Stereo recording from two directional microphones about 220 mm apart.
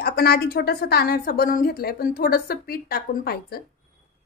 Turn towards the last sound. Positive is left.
turn(degrees=45)  # may be behind; listen again after turning